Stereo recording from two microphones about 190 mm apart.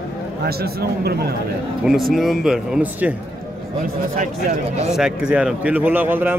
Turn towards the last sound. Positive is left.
turn(degrees=-10)  # may be behind; listen again after turning